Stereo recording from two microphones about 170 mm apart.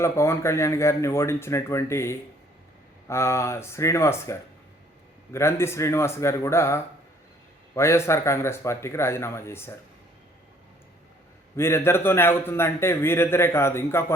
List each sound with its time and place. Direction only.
0.0 s a man's voice: 15° left (ahead or behind)
11.5 s a man's voice: 15° left (ahead or behind)